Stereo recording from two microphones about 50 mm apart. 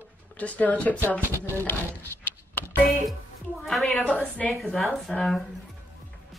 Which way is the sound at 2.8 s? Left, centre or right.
Centre.